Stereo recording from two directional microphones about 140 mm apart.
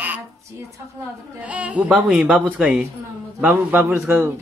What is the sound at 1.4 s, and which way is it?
A man's voice, 10° right (ahead or behind).